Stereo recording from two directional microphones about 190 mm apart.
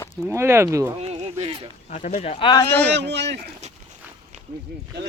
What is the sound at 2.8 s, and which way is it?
Speech, 65° right (ahead or behind).